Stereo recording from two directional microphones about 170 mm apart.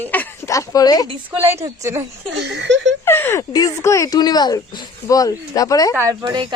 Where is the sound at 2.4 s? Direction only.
85° right.